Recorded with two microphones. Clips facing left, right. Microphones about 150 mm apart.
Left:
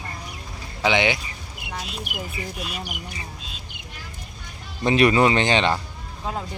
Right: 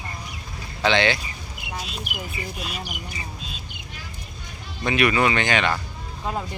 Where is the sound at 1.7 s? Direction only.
Centre (ahead or behind).